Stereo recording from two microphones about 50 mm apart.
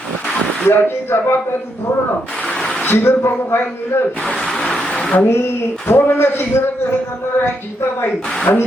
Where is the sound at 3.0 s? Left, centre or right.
Left.